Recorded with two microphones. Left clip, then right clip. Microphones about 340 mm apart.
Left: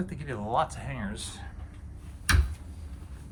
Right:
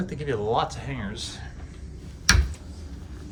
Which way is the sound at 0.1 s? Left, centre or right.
Centre.